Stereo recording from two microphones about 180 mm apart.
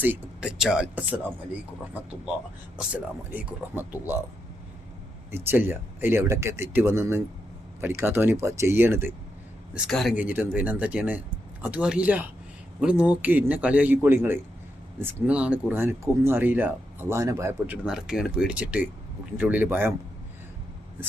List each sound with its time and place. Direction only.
0.0 s speech: 5° right (ahead or behind)
2.7 s speech: 10° right (ahead or behind)
5.3 s speech: 10° right (ahead or behind)
9.7 s speech: centre (ahead or behind)